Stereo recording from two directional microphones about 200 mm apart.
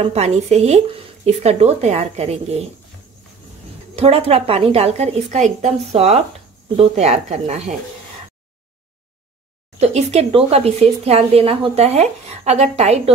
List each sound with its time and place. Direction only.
0.0 s speech: 30° right (ahead or behind)
3.9 s speech: 30° right (ahead or behind)
9.8 s speech: 35° right (ahead or behind)